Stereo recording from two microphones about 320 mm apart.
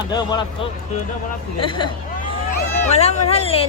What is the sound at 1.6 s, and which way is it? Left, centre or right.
Speech, centre.